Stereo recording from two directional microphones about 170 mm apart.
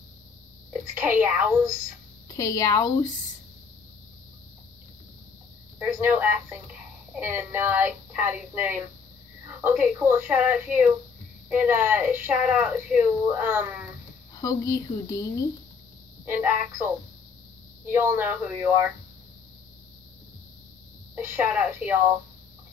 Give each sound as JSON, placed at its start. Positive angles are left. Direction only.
{"t": 0.9, "sound": "speech", "side_deg": -10}
{"t": 2.2, "sound": "speech", "side_deg": 20}
{"t": 5.9, "sound": "speech", "side_deg": -10}
{"t": 14.4, "sound": "speech", "side_deg": 20}
{"t": 16.3, "sound": "speech", "side_deg": -10}
{"t": 21.1, "sound": "speech", "side_deg": -10}